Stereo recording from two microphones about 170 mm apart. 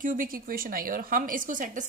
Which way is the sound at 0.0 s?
55° right (ahead or behind).